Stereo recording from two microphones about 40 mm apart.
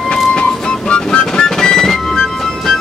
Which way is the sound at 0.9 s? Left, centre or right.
Left.